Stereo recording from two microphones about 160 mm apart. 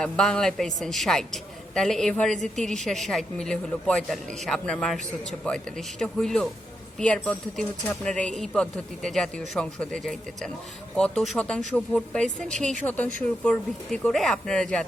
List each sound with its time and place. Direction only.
0.0 s a man's voice: 5° left (ahead or behind)